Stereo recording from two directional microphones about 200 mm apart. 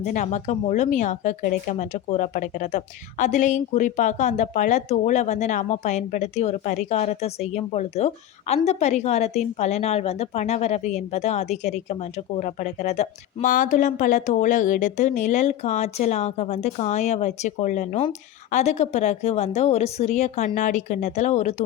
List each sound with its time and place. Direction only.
0.0 s speech: 40° left (ahead or behind)